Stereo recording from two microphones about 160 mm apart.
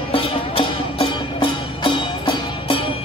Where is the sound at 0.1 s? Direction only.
35° left (ahead or behind).